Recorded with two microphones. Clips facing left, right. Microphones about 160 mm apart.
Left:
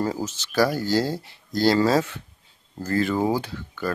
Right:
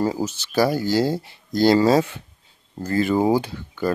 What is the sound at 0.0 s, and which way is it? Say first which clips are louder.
Speech: right 3 dB; 10° right (ahead or behind).